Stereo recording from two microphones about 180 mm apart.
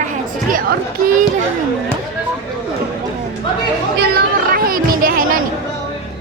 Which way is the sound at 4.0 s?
55° right (ahead or behind).